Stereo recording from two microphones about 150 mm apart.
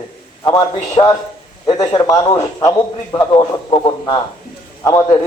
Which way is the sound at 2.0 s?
25° left (ahead or behind).